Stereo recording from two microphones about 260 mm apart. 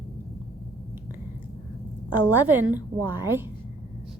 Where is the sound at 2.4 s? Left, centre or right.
Centre.